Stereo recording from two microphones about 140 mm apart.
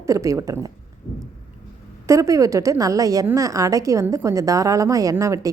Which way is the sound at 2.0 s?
20° right (ahead or behind).